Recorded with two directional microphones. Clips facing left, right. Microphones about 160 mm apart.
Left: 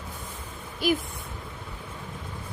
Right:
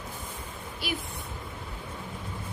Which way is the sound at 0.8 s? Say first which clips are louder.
Left 10 dB; 45° left (ahead or behind).